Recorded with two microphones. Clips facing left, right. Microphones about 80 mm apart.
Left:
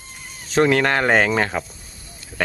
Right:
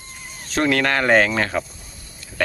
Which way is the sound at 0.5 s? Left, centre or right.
Centre.